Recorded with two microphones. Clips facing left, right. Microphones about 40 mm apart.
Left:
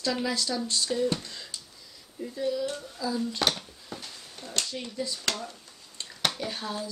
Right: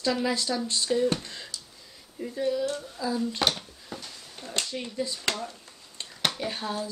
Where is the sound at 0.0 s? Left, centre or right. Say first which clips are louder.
Right 2 dB; centre.